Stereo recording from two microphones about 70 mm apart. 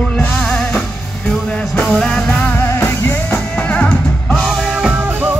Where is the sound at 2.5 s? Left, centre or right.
Left.